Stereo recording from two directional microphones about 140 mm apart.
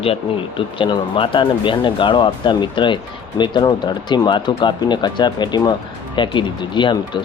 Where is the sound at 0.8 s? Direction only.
35° left (ahead or behind).